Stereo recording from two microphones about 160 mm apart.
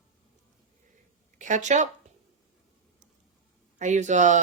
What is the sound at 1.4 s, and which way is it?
Speech, 50° right (ahead or behind).